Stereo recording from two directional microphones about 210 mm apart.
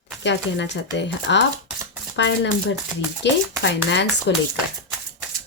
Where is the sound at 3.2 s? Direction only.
55° left (ahead or behind).